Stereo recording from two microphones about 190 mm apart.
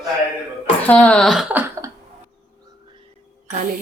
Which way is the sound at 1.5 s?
10° right (ahead or behind).